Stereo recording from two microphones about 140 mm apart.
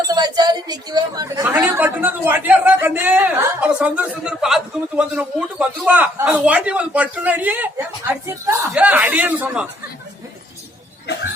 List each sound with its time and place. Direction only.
0.1 s a woman's voice: 30° right (ahead or behind)
1.6 s a man's voice: 15° right (ahead or behind)